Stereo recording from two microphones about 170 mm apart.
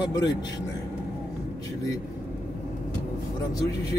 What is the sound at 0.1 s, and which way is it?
Speech, 20° left (ahead or behind).